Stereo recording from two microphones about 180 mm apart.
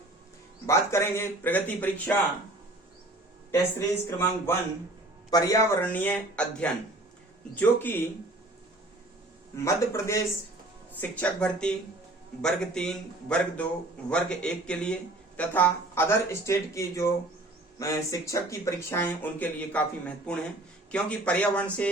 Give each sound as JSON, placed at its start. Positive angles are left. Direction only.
{"t": 0.7, "sound": "speech", "side_deg": 15}
{"t": 3.5, "sound": "speech", "side_deg": 15}
{"t": 5.8, "sound": "speech", "side_deg": 10}
{"t": 9.6, "sound": "a man's voice", "side_deg": 15}